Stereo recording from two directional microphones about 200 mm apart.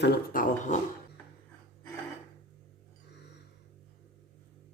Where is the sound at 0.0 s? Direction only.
55° left (ahead or behind).